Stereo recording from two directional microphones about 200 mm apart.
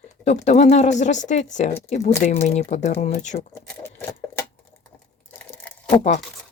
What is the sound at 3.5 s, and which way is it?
Speech, 10° left (ahead or behind).